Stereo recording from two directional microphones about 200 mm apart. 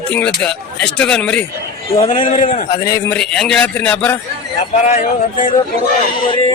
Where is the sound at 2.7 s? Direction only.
15° left (ahead or behind).